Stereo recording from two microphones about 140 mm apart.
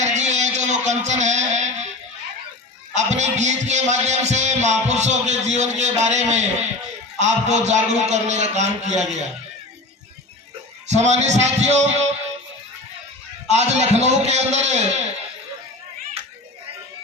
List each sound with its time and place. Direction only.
0.0 s music: 55° right (ahead or behind)
2.9 s speech: 55° right (ahead or behind)
10.8 s a man's voice: 55° right (ahead or behind)
13.5 s a man's voice: 50° right (ahead or behind)